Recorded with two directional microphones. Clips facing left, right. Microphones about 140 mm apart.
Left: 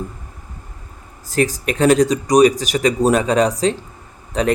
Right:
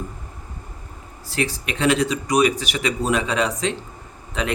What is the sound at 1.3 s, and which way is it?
Speech, 45° left (ahead or behind).